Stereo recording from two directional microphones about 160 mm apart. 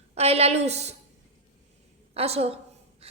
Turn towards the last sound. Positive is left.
turn(degrees=-40)  # may be behind; listen again after turning